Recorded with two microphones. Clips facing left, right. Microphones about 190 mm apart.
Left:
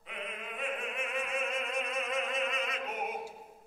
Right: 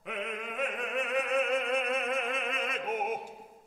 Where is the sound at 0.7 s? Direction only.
70° right (ahead or behind); by 3.2 s 50° right (ahead or behind).